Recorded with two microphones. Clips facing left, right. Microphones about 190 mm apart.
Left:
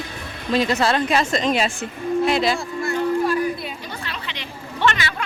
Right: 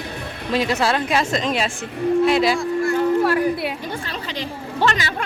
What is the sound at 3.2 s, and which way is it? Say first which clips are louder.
Speech: right 3 dB; 70° right (ahead or behind).